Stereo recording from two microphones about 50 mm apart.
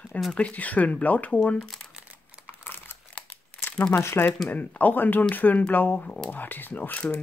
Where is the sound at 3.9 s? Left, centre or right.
Left.